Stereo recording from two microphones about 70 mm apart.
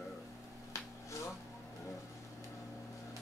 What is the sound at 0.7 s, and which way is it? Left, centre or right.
Finger snapping, left.